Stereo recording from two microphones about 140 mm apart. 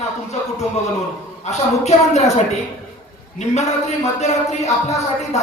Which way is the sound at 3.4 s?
55° left (ahead or behind).